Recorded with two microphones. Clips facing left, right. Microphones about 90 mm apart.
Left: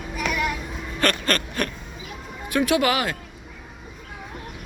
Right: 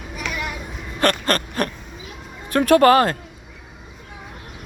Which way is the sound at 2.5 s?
45° right (ahead or behind).